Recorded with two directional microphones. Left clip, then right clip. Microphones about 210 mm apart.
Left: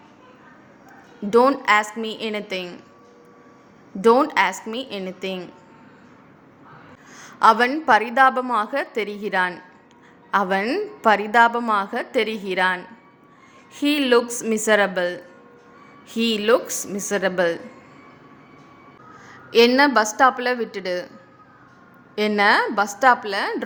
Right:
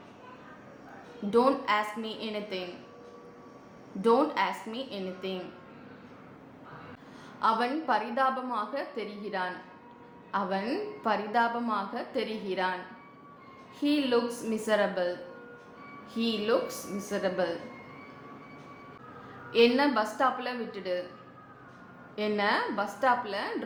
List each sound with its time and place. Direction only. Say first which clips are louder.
1.3 s a woman's voice: left 9 dB; 50° left (ahead or behind)
4.0 s a woman's voice: left 9 dB; 50° left (ahead or behind)
7.2 s a woman's voice: left 12 dB; 50° left (ahead or behind)
16.1 s a woman's voice: left 10 dB; 50° left (ahead or behind)
19.5 s a woman's voice: left 9 dB; 55° left (ahead or behind)
22.1 s a woman's voice: left 11 dB; 55° left (ahead or behind)